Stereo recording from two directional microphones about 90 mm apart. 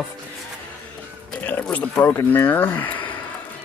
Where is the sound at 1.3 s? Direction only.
15° left (ahead or behind).